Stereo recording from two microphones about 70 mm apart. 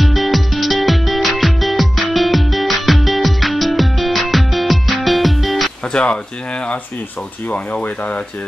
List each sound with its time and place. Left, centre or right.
0.0 s music: centre
5.9 s speech: centre
7.4 s speech: left